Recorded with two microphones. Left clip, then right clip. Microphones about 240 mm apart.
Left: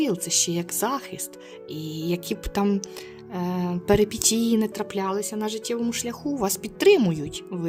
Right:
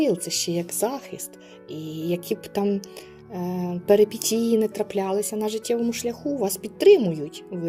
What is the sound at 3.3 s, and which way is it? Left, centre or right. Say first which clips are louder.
Music: left 1 dB; left.